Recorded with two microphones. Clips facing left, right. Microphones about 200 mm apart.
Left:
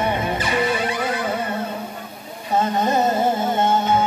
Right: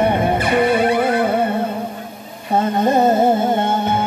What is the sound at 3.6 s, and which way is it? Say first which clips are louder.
Music: even; 60° right (ahead or behind).